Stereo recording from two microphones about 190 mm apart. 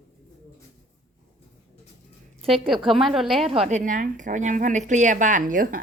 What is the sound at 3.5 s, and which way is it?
A woman's voice, 35° right (ahead or behind).